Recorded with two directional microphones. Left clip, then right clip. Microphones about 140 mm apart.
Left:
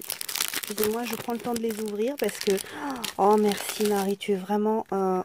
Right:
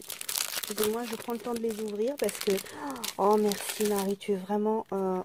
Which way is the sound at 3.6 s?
30° left (ahead or behind).